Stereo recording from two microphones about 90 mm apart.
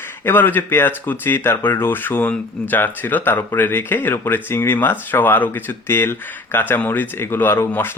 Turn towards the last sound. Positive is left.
turn(degrees=25)  # may be behind; listen again after turning